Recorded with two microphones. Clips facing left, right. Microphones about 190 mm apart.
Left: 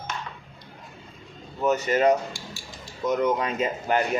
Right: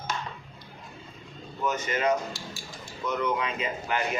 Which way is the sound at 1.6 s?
40° left (ahead or behind).